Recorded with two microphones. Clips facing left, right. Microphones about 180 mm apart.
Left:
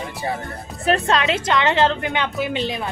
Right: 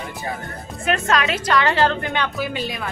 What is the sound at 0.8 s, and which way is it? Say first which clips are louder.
Speech: left 2 dB; 35° left (ahead or behind).